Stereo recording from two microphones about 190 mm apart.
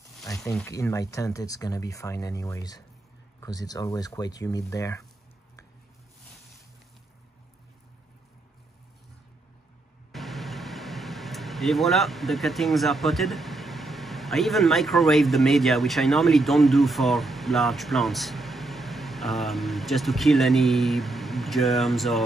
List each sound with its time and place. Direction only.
0.4 s speech: centre (ahead or behind)
0.7 s speech: 15° left (ahead or behind)
10.1 s speech: centre (ahead or behind)